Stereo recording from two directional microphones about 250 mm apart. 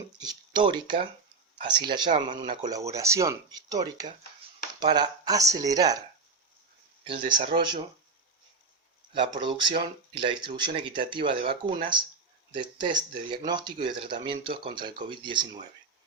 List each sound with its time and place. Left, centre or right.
0.6 s speech: centre
7.0 s speech: centre
9.1 s speech: centre